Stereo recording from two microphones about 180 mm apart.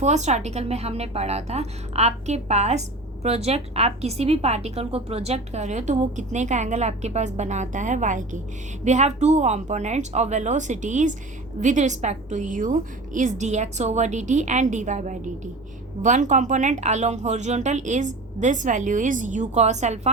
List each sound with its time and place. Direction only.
0.0 s a woman's voice: 40° right (ahead or behind)